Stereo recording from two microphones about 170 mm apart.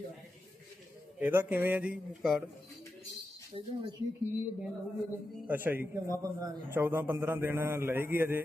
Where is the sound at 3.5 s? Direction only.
30° right (ahead or behind).